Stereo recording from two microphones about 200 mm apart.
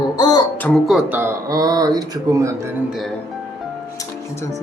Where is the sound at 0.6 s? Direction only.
5° left (ahead or behind); by 2.7 s 15° right (ahead or behind).